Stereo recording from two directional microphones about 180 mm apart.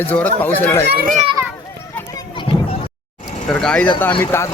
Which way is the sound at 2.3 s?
25° left (ahead or behind).